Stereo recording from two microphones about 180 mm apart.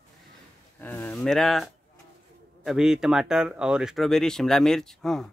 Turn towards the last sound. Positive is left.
turn(degrees=0)  # may be behind; listen again after turning